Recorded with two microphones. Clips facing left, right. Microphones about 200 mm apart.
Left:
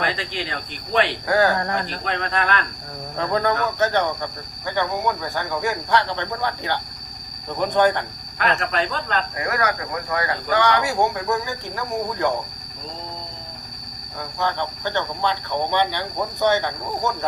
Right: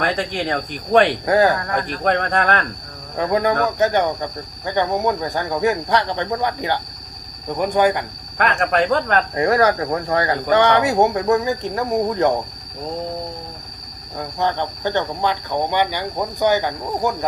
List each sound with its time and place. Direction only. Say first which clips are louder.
0.0 s speech: right 5 dB; 50° right (ahead or behind)
1.3 s speech: right 2 dB; 20° right (ahead or behind)
1.7 s speech: right 6 dB; 50° right (ahead or behind)
3.2 s speech: right 4 dB; 15° right (ahead or behind)
8.4 s speech: right 4 dB; 50° right (ahead or behind)
9.3 s speech: right 11 dB; 30° right (ahead or behind)
14.3 s speech: right 3 dB; 20° right (ahead or behind)